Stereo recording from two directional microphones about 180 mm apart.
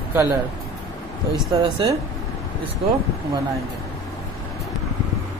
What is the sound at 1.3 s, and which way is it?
Speech, 20° right (ahead or behind).